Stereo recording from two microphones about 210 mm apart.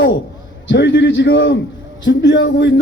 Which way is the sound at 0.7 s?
60° left (ahead or behind).